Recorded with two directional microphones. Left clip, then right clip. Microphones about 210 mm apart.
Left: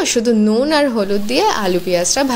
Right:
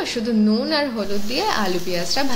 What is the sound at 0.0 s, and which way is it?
A woman's voice, 45° left (ahead or behind).